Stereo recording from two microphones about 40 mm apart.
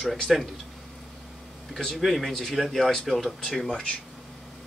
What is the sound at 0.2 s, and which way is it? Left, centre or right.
Speech, centre.